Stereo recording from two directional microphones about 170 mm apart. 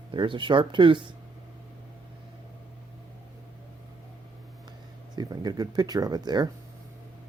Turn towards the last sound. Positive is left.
turn(degrees=-25)  # may be behind; listen again after turning